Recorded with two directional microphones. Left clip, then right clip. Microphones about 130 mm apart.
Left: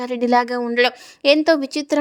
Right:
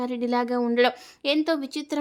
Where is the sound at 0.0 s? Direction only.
50° left (ahead or behind).